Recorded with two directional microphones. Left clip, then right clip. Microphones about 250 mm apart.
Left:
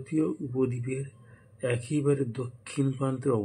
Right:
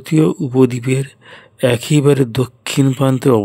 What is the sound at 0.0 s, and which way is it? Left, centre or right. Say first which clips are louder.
Speech: right 14 dB; right.